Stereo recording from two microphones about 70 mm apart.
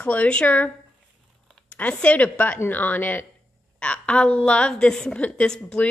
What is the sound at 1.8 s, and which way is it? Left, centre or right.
A woman's voice, left.